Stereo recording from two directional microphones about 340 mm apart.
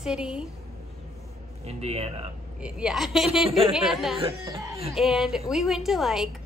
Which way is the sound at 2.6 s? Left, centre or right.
Centre.